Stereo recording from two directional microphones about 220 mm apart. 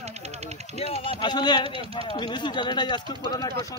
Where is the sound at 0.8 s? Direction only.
25° left (ahead or behind).